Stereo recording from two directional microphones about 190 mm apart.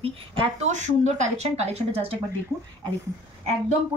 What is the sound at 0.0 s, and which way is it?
A woman's voice, 30° right (ahead or behind).